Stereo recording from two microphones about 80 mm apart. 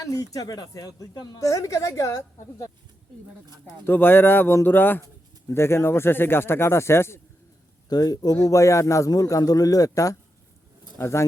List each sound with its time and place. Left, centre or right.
0.0 s a woman's voice: left
3.4 s speech: right
3.8 s a man's voice: left
7.9 s a woman's voice: left
10.9 s speech: left